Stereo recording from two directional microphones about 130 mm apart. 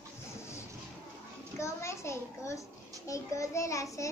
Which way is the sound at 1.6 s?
20° left (ahead or behind).